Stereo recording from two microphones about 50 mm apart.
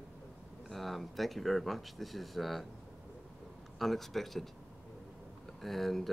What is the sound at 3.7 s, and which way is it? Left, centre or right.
Speech, centre.